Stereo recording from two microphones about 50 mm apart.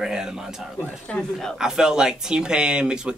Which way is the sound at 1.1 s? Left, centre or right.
Left.